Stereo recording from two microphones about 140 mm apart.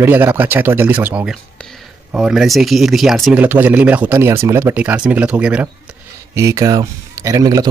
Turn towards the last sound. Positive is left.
turn(degrees=-25)  # may be behind; listen again after turning